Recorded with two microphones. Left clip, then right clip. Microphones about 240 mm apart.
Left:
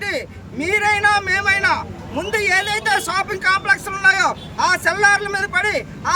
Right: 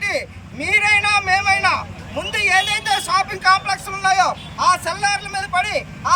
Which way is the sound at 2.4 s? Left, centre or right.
Centre.